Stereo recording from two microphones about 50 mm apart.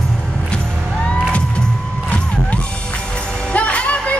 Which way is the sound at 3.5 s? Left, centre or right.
Left.